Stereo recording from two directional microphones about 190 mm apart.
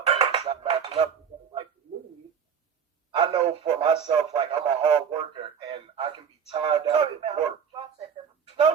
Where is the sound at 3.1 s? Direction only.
25° right (ahead or behind).